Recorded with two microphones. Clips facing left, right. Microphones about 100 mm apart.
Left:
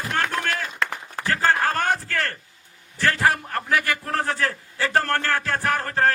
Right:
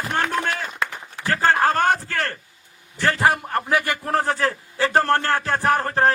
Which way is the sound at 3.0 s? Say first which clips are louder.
Right 2 dB; 20° right (ahead or behind).